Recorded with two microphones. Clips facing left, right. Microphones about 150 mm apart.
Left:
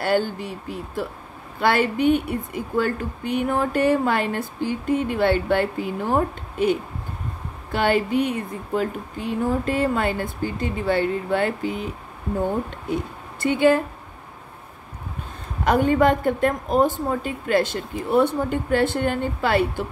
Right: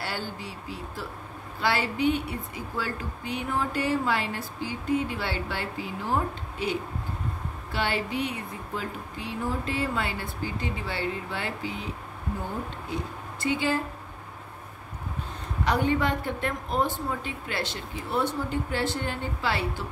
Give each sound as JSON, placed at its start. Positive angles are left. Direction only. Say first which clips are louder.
{"t": 0.0, "sound": "speech", "louder": "left 12 dB", "side_deg": 55}
{"t": 12.9, "sound": "a woman's voice", "louder": "left 8 dB", "side_deg": 55}
{"t": 15.6, "sound": "speech", "louder": "left 7 dB", "side_deg": 50}